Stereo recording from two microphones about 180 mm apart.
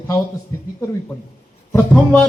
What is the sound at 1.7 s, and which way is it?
Speech, 10° left (ahead or behind).